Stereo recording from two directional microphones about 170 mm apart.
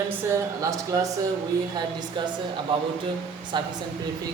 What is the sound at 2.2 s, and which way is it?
Speech, 25° right (ahead or behind).